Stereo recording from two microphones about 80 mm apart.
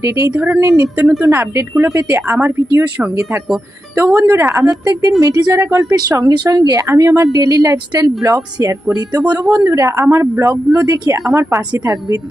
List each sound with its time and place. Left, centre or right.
0.0 s speech: right
0.3 s speech: right
0.6 s speech: right
1.0 s a woman's voice: centre
1.3 s speech: right
3.9 s speech: right
4.6 s speech: right
9.6 s speech: right